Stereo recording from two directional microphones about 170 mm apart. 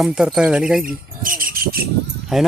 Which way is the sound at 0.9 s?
55° right (ahead or behind).